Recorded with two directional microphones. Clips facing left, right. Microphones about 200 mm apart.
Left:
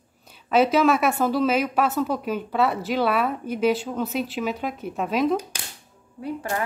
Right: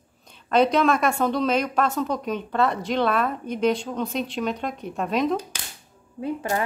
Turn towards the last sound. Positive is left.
turn(degrees=-20)  # may be behind; listen again after turning